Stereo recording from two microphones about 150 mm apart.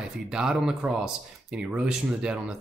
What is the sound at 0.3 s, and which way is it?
Speech, 5° right (ahead or behind).